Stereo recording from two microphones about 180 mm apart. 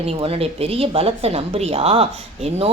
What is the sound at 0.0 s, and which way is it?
Speech, 35° right (ahead or behind).